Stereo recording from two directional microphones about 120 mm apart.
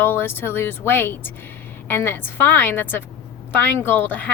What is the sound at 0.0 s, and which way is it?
A woman's voice, 20° left (ahead or behind).